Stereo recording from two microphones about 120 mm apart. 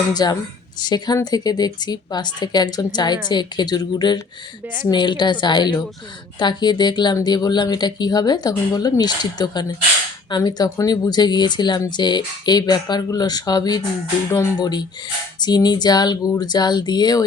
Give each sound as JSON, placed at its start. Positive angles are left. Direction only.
{"t": 0.1, "sound": "speech", "side_deg": 35}